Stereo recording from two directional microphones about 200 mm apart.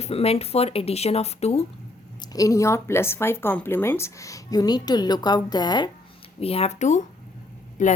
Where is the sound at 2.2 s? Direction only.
20° left (ahead or behind).